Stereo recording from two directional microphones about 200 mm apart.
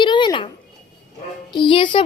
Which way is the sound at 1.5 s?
25° left (ahead or behind).